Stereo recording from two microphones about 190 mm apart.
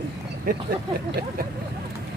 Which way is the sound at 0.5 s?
45° right (ahead or behind).